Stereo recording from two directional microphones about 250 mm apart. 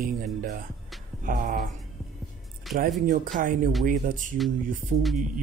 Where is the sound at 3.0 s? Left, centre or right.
Right.